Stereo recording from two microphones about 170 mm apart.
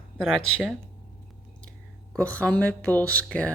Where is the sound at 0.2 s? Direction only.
5° right (ahead or behind).